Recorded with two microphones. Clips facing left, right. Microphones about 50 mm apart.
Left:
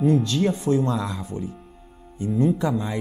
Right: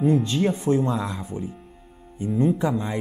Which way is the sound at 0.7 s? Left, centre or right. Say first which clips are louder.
Even; centre.